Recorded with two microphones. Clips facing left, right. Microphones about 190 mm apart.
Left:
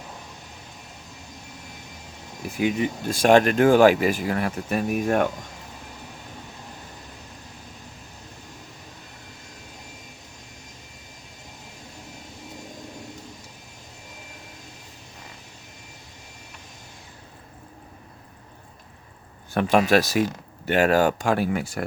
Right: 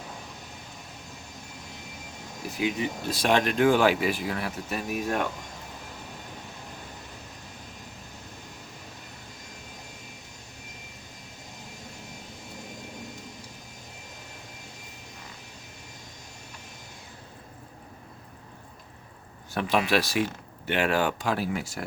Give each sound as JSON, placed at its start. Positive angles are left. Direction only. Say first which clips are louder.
{"t": 2.6, "sound": "speech", "louder": "left 5 dB", "side_deg": 45}
{"t": 19.5, "sound": "speech", "louder": "left 6 dB", "side_deg": 50}